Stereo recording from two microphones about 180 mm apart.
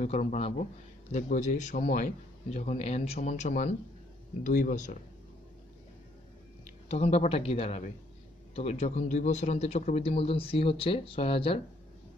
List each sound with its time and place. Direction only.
0.0 s a man's voice: 40° left (ahead or behind)
6.9 s a man's voice: 35° left (ahead or behind)